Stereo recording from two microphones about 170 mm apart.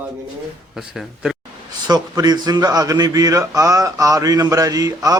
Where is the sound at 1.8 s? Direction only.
20° right (ahead or behind).